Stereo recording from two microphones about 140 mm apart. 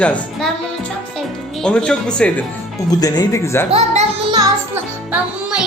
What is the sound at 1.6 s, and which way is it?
Speech, 5° left (ahead or behind).